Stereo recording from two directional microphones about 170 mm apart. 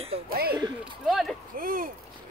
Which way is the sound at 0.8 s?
Centre (ahead or behind).